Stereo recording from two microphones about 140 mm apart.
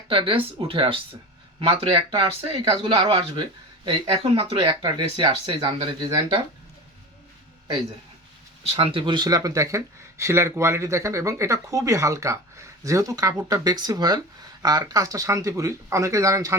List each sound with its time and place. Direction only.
0.1 s speech: 40° right (ahead or behind)
8.6 s speech: 40° right (ahead or behind); by 16.6 s 20° right (ahead or behind)